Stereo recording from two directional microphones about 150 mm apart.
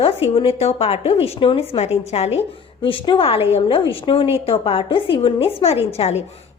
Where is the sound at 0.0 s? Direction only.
40° left (ahead or behind).